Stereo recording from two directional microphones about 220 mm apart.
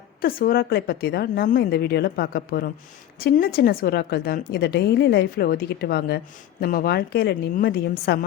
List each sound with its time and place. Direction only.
0.2 s a woman's voice: 40° left (ahead or behind)